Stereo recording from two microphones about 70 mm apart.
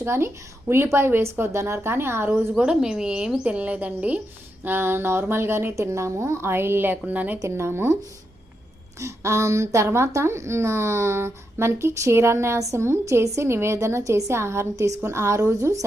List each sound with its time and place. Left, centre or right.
0.0 s a woman's voice: right
2.6 s a woman's voice: centre
7.3 s speech: right
9.0 s speech: right